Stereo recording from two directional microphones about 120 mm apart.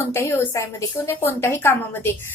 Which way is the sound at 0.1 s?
20° left (ahead or behind).